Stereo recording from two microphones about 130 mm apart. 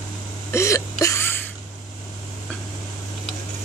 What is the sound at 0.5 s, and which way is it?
Hiccup, 20° left (ahead or behind).